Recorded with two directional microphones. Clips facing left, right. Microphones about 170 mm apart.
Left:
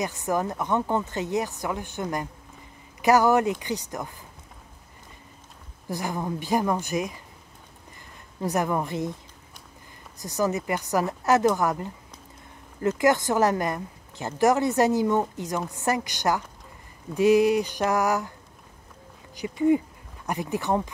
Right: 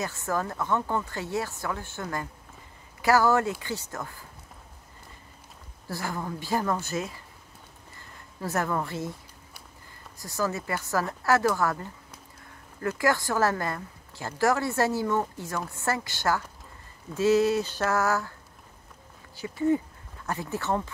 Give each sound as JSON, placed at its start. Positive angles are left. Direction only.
{"t": 0.0, "sound": "speech", "side_deg": 15}
{"t": 5.9, "sound": "speech", "side_deg": 15}
{"t": 8.4, "sound": "speech", "side_deg": 15}
{"t": 19.3, "sound": "speech", "side_deg": 15}